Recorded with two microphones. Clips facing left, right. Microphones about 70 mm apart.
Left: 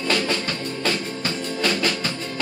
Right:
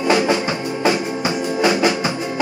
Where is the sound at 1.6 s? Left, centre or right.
Centre.